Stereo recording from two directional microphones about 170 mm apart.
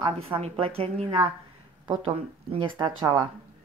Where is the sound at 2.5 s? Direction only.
25° right (ahead or behind).